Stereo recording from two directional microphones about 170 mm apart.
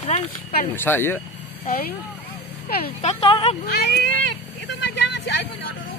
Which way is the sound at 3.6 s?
70° left (ahead or behind).